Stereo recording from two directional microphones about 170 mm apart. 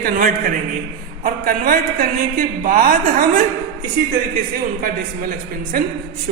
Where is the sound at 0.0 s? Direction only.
60° right (ahead or behind).